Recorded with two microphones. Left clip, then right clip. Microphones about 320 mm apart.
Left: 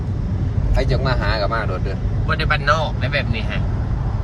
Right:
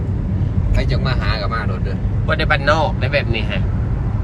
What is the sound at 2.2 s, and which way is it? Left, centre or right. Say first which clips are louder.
Speech: right 2 dB; centre.